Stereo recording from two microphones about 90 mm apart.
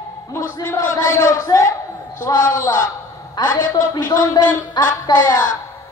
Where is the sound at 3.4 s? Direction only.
50° left (ahead or behind).